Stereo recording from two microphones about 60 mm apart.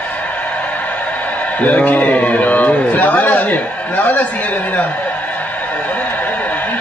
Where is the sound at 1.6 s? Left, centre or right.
Left.